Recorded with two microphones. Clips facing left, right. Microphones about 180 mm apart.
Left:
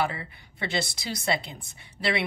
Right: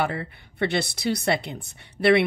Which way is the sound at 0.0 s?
60° right (ahead or behind).